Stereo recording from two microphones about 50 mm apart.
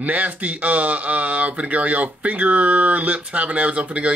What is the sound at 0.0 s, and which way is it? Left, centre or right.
Speech, right.